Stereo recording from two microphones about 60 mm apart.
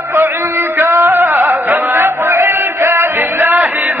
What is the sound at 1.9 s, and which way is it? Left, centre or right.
Music, right.